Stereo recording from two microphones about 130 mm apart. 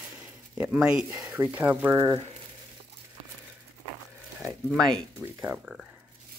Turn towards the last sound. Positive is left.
turn(degrees=-5)  # may be behind; listen again after turning